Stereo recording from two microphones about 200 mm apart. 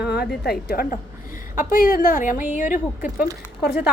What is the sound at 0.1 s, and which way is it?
Speech, 55° left (ahead or behind).